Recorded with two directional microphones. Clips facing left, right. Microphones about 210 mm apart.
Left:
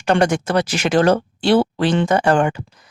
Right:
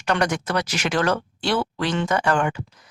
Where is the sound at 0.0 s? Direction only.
30° left (ahead or behind).